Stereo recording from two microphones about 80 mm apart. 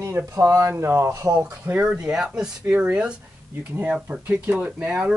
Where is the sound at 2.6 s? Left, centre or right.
Right.